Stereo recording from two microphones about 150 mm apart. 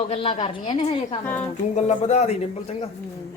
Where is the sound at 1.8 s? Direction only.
50° left (ahead or behind).